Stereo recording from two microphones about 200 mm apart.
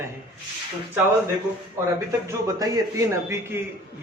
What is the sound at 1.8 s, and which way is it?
A man's voice, 10° right (ahead or behind).